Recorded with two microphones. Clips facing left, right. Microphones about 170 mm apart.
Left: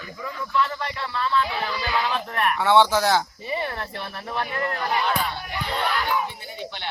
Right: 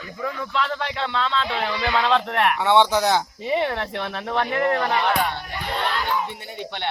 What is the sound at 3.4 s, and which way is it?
Speech, 70° right (ahead or behind).